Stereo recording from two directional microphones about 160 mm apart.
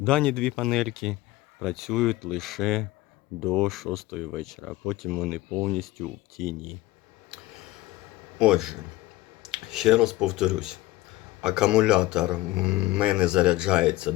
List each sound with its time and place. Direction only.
0.0 s speech: 5° left (ahead or behind)
8.4 s speech: 5° right (ahead or behind)